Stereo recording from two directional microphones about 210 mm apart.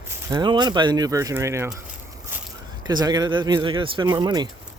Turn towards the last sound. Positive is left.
turn(degrees=-20)  # may be behind; listen again after turning